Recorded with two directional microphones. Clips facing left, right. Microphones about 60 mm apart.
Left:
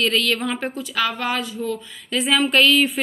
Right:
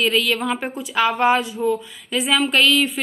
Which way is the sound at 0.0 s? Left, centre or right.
Centre.